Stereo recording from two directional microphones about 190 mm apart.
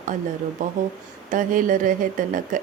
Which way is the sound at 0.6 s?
40° right (ahead or behind).